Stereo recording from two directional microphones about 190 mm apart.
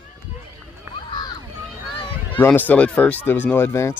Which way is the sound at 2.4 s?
10° left (ahead or behind).